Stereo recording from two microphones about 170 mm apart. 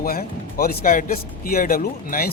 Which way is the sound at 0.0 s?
60° left (ahead or behind).